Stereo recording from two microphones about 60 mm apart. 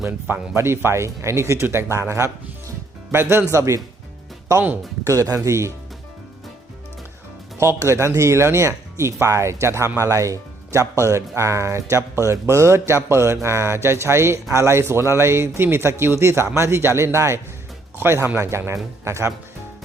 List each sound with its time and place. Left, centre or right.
0.5 s speech: right
5.0 s speech: right
7.8 s speech: right